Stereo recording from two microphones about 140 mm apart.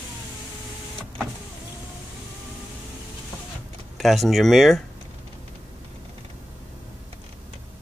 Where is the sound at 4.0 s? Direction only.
Centre (ahead or behind).